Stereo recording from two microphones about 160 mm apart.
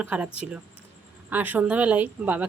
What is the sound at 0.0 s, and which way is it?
Speech, 10° right (ahead or behind).